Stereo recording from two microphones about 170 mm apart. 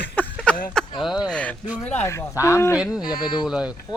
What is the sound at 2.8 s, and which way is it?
Speech, 5° right (ahead or behind).